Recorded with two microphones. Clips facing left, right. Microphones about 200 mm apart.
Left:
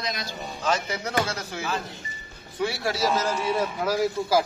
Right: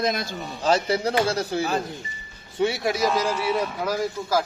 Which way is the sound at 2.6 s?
20° right (ahead or behind).